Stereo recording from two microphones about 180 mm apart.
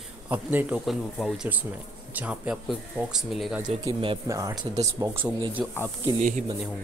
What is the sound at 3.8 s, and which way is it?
Speech, 30° right (ahead or behind).